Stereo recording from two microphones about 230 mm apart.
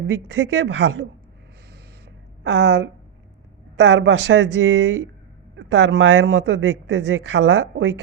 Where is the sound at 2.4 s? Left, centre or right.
Right.